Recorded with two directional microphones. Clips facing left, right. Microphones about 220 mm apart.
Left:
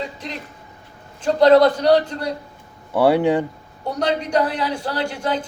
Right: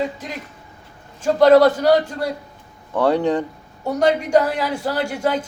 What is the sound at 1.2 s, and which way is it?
A man's voice, 5° right (ahead or behind).